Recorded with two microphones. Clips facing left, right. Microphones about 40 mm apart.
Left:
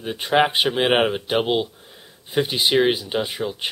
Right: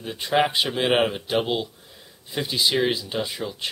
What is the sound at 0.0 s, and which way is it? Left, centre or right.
Speech, left.